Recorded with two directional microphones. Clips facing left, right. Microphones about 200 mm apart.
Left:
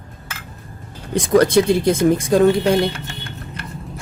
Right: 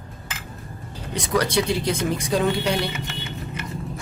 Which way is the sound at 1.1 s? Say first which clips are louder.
Left 9 dB; 50° left (ahead or behind).